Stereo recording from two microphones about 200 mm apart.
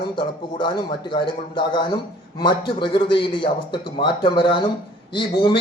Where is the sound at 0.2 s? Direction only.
25° left (ahead or behind).